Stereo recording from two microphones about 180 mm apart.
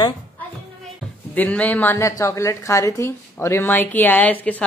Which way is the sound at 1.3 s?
10° left (ahead or behind).